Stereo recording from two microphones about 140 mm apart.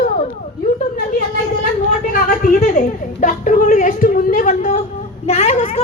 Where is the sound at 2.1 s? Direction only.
80° left.